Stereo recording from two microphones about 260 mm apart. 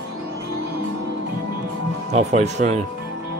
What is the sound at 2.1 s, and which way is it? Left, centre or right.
Speech, right.